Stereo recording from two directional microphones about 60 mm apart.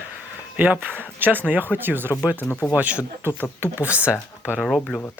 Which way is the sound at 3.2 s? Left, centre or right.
Right.